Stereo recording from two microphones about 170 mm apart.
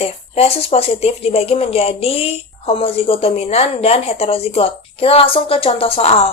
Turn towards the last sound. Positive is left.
turn(degrees=35)  # may be behind; listen again after turning